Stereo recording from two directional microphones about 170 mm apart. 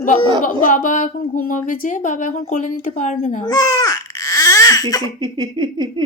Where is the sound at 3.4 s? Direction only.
20° left (ahead or behind).